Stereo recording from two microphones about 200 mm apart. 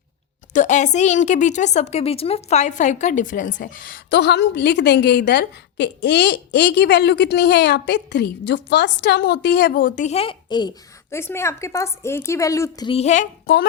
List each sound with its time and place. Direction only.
0.5 s a woman's voice: 35° left (ahead or behind)